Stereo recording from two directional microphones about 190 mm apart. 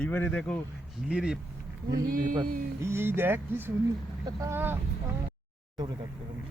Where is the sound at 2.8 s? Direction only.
10° right (ahead or behind).